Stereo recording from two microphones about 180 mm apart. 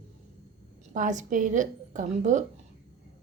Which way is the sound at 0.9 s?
45° right (ahead or behind).